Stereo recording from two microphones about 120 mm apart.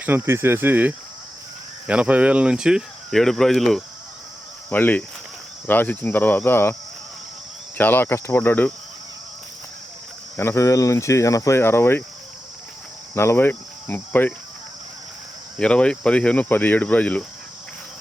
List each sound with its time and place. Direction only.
0.0 s speech: 20° right (ahead or behind); by 3.8 s centre (ahead or behind)
4.7 s speech: 15° left (ahead or behind)
7.8 s speech: 15° left (ahead or behind)
10.3 s speech: 20° left (ahead or behind)
13.1 s cricket: 20° left (ahead or behind)
15.5 s speech: 10° left (ahead or behind)